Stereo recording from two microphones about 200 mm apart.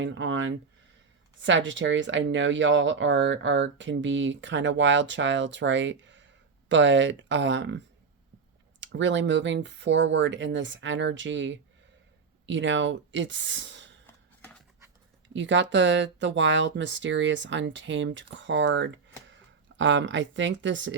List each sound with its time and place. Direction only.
0.0 s speech: 70° right (ahead or behind)
8.8 s speech: 65° right (ahead or behind)
14.1 s a sound: 5° left (ahead or behind)
15.3 s speech: 65° right (ahead or behind)